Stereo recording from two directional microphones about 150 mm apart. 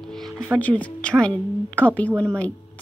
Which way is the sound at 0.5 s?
10° left (ahead or behind).